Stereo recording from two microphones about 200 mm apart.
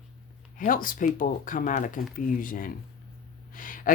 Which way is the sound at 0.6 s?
45° left (ahead or behind).